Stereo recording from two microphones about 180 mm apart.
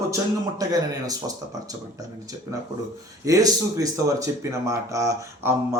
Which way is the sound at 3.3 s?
20° right (ahead or behind).